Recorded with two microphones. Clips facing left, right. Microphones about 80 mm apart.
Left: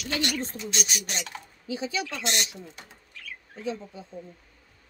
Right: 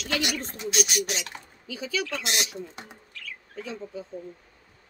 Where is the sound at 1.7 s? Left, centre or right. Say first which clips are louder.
Left 1 dB; left.